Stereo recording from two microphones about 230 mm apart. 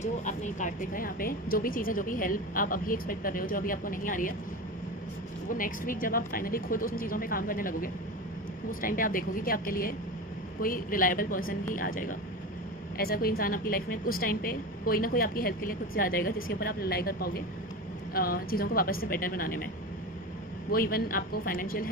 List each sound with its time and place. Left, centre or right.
0.0 s speech: left
5.5 s speech: left
20.7 s speech: left